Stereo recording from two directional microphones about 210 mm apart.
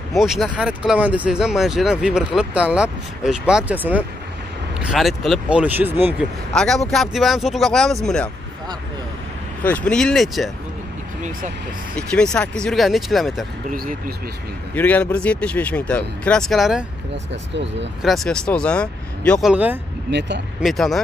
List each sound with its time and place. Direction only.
0.1 s speech: centre (ahead or behind)
6.5 s speech: 5° left (ahead or behind)
9.6 s speech: 5° left (ahead or behind)
12.1 s speech: 5° left (ahead or behind)
13.7 s speech: 40° right (ahead or behind)
14.7 s speech: 10° left (ahead or behind)
17.3 s speech: 60° right (ahead or behind)
18.0 s speech: centre (ahead or behind)
19.5 s speech: 5° right (ahead or behind)
20.1 s speech: 55° right (ahead or behind)
20.6 s speech: centre (ahead or behind)